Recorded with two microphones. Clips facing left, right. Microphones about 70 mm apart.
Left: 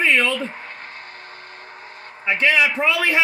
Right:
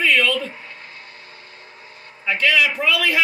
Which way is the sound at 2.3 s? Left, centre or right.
Left.